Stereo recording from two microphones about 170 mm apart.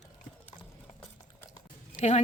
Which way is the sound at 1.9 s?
40° left (ahead or behind).